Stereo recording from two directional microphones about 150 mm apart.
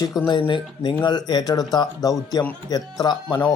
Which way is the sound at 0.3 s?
35° left (ahead or behind).